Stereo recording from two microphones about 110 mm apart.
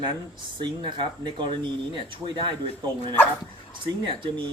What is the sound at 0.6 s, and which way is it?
Speech, 45° right (ahead or behind).